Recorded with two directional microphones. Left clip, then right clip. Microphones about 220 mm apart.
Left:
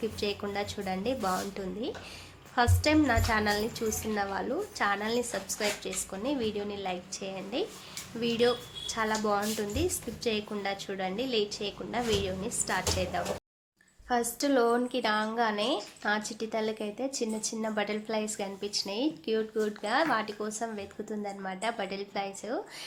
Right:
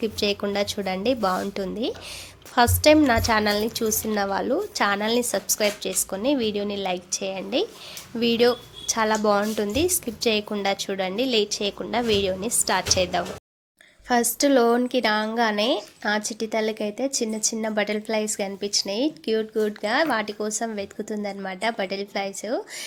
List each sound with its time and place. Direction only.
0.0 s a woman's voice: 40° right (ahead or behind)